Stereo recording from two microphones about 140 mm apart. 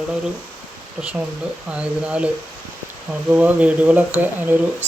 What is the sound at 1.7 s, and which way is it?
Speech, 10° right (ahead or behind).